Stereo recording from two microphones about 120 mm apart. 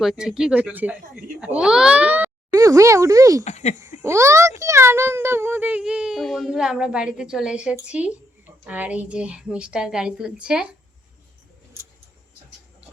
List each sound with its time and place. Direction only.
0.0 s a child's voice: 5° right (ahead or behind)
2.5 s speech: 25° right (ahead or behind)
3.4 s speech: 65° left (ahead or behind)
4.0 s a child's voice: 25° right (ahead or behind); by 10.7 s 10° right (ahead or behind)